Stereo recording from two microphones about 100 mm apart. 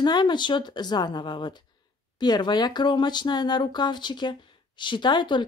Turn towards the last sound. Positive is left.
turn(degrees=50)  # may be behind; listen again after turning